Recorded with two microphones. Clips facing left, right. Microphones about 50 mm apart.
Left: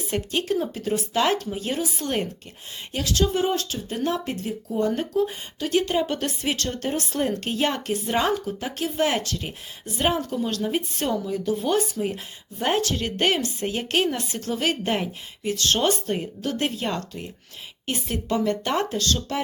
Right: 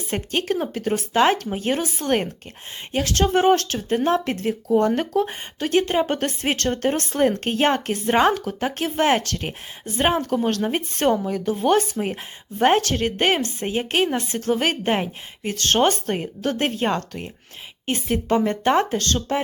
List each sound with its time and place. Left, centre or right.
0.1 s a woman's voice: right
1.1 s a woman's voice: right
3.8 s a woman's voice: right
10.0 s a woman's voice: right
10.2 s a woman's voice: right
14.2 s a woman's voice: right